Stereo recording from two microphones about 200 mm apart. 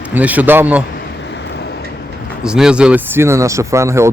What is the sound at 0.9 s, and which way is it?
Vehicle, 60° left (ahead or behind).